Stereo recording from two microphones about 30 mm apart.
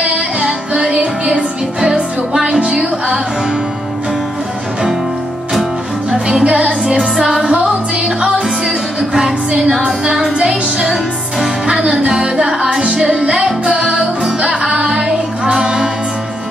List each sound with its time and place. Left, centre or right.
0.0 s music: right
6.4 s music: right
10.4 s music: right
12.6 s music: right